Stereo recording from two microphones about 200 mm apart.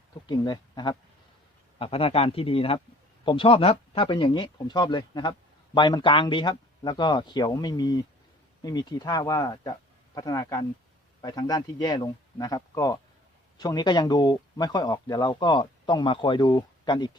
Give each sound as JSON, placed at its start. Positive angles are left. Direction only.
{"t": 0.3, "sound": "speech", "side_deg": 20}